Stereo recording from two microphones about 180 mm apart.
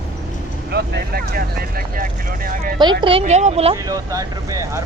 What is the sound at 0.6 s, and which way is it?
Speech, 65° right (ahead or behind).